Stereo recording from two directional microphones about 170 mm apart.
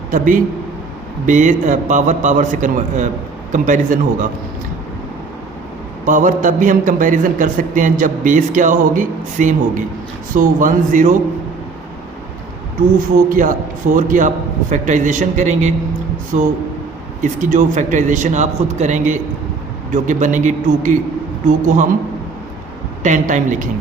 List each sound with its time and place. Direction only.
0.1 s a man's voice: 50° right (ahead or behind)
6.1 s a man's voice: 50° right (ahead or behind)
13.1 s a man's voice: 50° right (ahead or behind)
17.2 s a man's voice: 45° right (ahead or behind)
23.0 s a man's voice: 45° right (ahead or behind)